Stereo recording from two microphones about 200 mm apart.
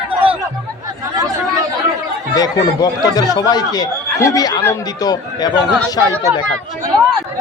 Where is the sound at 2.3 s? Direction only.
20° left (ahead or behind).